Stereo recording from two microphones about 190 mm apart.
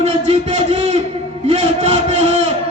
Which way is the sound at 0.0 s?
35° right (ahead or behind).